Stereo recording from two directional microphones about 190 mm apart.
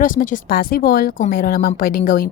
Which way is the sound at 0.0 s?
45° left (ahead or behind).